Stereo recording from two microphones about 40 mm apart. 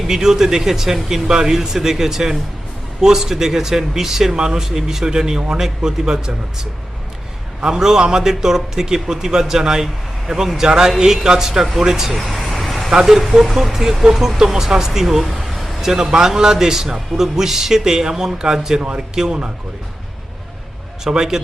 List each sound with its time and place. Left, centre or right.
0.1 s speech: centre
7.6 s speech: centre
12.1 s vehicle: centre
12.9 s speech: centre
21.0 s speech: centre